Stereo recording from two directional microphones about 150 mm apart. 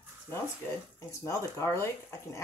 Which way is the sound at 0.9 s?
20° left (ahead or behind).